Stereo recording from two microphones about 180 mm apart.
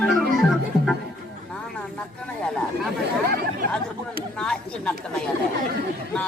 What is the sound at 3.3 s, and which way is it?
Chatter, 55° right (ahead or behind).